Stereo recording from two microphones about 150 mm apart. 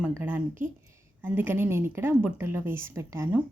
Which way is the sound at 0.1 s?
15° right (ahead or behind).